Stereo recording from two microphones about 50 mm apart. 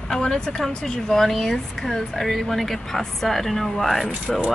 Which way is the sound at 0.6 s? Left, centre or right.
Centre.